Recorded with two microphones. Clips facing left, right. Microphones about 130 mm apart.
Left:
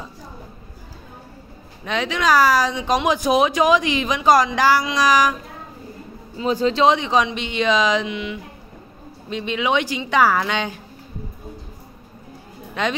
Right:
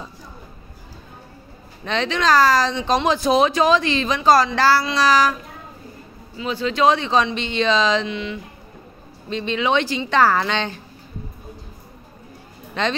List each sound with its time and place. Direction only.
1.9 s speech: 10° left (ahead or behind)
6.3 s speech: 40° left (ahead or behind)
6.8 s speech: 15° left (ahead or behind)
12.8 s speech: 10° left (ahead or behind)